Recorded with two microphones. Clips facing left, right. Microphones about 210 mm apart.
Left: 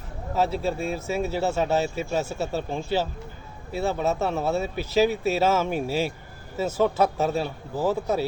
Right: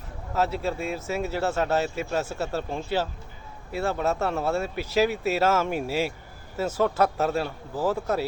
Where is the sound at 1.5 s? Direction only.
5° left (ahead or behind).